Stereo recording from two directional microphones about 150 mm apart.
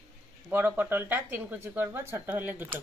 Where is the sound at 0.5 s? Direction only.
10° right (ahead or behind).